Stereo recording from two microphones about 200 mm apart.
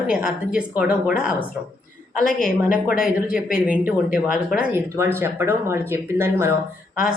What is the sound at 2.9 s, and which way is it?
Speech, 5° right (ahead or behind).